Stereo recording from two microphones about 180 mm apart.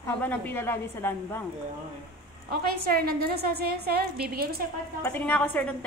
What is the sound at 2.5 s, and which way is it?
A woman's voice, 55° right (ahead or behind).